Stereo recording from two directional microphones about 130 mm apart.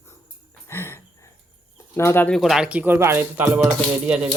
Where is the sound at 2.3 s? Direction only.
Centre (ahead or behind); by 3.4 s 20° right (ahead or behind).